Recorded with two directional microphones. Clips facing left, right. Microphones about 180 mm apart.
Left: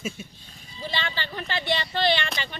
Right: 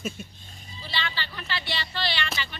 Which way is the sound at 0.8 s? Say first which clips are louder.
Left 3 dB; 45° left (ahead or behind).